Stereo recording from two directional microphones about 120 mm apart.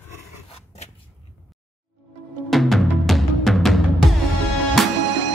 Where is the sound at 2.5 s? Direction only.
Centre (ahead or behind).